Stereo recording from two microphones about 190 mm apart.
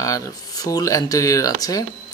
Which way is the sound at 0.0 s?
15° left (ahead or behind).